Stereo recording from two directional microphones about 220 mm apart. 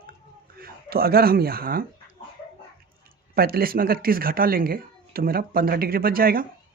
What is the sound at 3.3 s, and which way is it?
Speech, 45° right (ahead or behind).